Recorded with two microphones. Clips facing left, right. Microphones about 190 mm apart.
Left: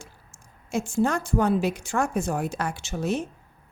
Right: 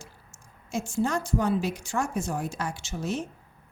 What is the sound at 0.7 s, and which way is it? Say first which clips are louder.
A woman's voice: left 3 dB; 55° left (ahead or behind).